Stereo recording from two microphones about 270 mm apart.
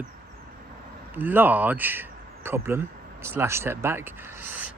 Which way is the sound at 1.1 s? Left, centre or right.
Centre.